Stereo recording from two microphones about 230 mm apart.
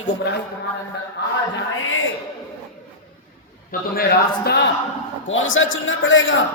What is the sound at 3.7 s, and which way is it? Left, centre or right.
Speech, left.